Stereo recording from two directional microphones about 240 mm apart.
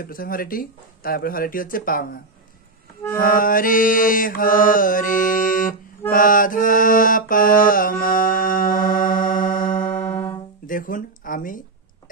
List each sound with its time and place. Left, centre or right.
0.0 s mantra: left
3.2 s mantra: left
10.0 s music: centre
10.7 s speech: left